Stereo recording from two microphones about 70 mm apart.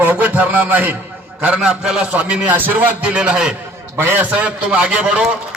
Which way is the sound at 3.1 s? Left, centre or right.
Centre.